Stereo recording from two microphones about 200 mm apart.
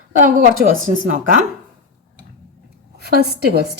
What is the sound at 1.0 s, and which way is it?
Speech, 40° right (ahead or behind).